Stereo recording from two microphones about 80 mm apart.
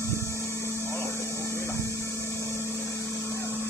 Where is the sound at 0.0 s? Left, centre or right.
Left.